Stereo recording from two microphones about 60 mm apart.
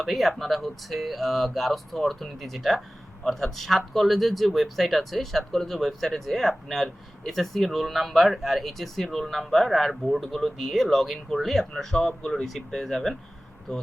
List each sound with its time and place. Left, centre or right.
0.0 s speech: centre